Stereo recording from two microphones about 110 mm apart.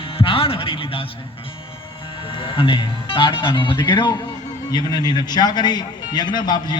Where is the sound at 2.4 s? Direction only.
50° left (ahead or behind).